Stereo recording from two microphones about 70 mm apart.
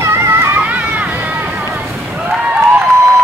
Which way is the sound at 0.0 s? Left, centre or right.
Right.